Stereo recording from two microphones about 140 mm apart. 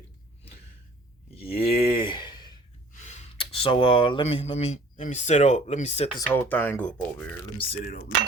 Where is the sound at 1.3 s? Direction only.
45° left (ahead or behind).